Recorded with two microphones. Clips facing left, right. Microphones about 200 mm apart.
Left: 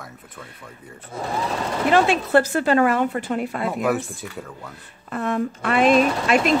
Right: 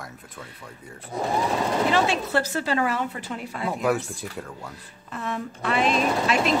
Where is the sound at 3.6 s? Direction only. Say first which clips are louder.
Even; centre (ahead or behind).